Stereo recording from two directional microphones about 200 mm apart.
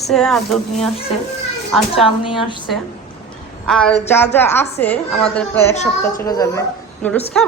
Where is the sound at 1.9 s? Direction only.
25° left (ahead or behind).